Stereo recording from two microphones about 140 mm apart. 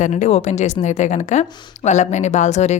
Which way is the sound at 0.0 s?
60° left (ahead or behind).